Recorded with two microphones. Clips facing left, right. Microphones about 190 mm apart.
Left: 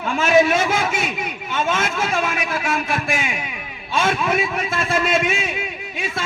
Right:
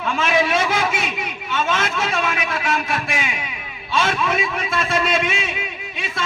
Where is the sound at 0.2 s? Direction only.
50° left (ahead or behind).